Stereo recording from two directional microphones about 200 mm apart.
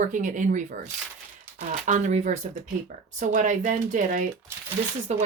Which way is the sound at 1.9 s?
35° right (ahead or behind).